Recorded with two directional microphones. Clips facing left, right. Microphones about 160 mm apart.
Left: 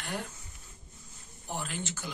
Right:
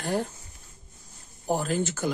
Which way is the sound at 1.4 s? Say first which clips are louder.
Right 11 dB; 40° right (ahead or behind).